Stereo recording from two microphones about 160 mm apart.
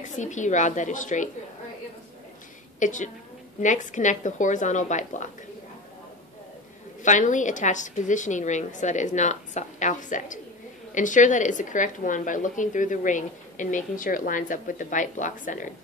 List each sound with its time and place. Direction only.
0.0 s speech: 50° left (ahead or behind)
2.8 s speech: 50° left (ahead or behind)
7.0 s speech: 50° left (ahead or behind)